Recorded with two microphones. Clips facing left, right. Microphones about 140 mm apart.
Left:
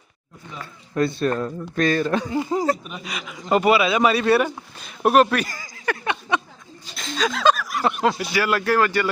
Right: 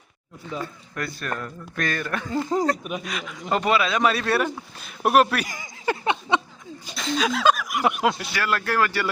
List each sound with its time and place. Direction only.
0.9 s speech: 25° left (ahead or behind); by 5.5 s 5° right (ahead or behind)
5.5 s a sound: 25° right (ahead or behind)
7.2 s speech: 5° right (ahead or behind)
8.1 s speech: centre (ahead or behind)